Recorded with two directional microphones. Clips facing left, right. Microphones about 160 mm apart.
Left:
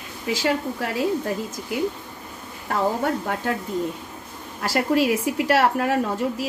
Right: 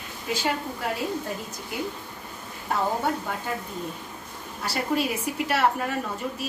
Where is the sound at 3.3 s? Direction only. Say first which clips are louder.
Left 5 dB; 90° left.